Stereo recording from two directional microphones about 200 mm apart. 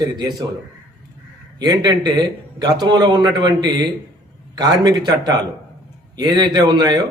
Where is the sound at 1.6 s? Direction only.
20° right (ahead or behind).